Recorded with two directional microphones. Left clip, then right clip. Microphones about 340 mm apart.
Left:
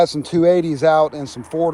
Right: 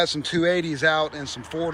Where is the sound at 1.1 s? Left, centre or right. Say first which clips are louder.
Left 4 dB; left.